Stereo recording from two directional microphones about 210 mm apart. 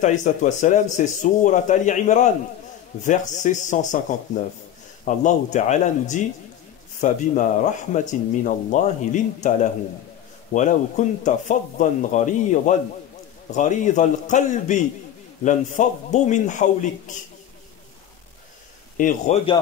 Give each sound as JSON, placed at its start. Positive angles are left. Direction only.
{"t": 0.0, "sound": "a man's voice", "side_deg": 35}
{"t": 5.0, "sound": "a man's voice", "side_deg": 35}
{"t": 18.9, "sound": "a man's voice", "side_deg": 40}